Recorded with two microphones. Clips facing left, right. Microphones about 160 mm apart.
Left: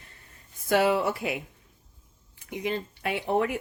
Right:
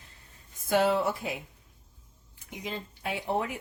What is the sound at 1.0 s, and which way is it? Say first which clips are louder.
Speech: left 2 dB; 70° left (ahead or behind).